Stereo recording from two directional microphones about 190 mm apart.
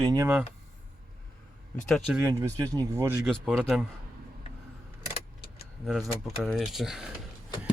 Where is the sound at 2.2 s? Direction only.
15° right (ahead or behind).